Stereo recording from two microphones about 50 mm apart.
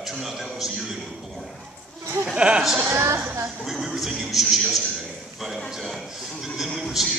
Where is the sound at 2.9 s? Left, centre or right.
Right.